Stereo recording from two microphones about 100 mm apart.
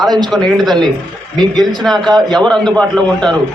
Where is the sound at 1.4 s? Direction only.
45° right (ahead or behind).